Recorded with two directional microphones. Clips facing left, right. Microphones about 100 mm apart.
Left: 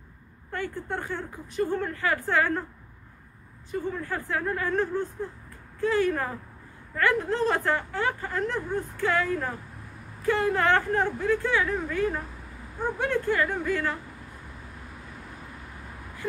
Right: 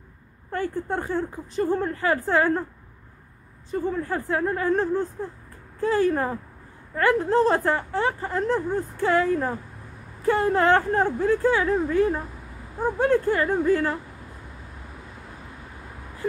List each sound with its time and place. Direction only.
0.5 s a woman's voice: 35° right (ahead or behind)
4.0 s a woman's voice: 30° right (ahead or behind)